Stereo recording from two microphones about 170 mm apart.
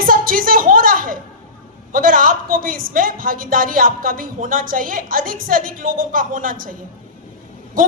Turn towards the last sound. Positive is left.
turn(degrees=-55)  # may be behind; listen again after turning